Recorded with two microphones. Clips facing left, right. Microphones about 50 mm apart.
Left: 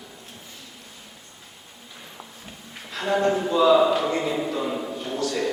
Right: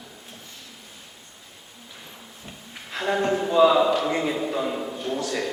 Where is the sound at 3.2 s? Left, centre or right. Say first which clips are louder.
Left 2 dB; centre.